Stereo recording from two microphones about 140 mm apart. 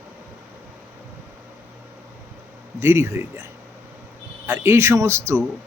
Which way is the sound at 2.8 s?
20° right (ahead or behind).